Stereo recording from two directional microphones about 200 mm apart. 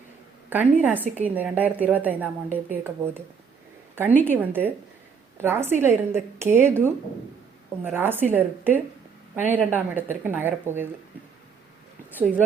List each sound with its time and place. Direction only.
0.5 s a woman's voice: 10° right (ahead or behind)
4.3 s a woman's voice: 10° right (ahead or behind)